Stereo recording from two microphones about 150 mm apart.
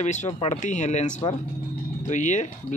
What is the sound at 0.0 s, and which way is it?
Speech, 50° left (ahead or behind).